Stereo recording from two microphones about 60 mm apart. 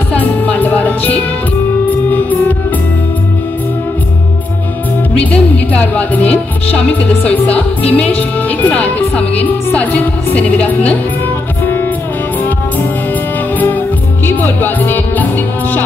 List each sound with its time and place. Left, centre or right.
0.1 s music: left
5.2 s music: left
7.0 s speech: left
12.4 s music: left